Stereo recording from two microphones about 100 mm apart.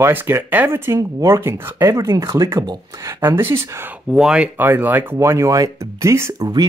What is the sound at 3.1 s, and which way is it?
Speech, 25° right (ahead or behind).